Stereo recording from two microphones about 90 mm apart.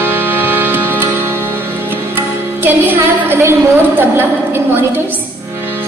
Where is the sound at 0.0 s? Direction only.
20° right (ahead or behind).